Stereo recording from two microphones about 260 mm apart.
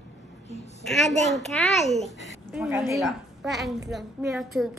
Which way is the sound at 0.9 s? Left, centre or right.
Centre.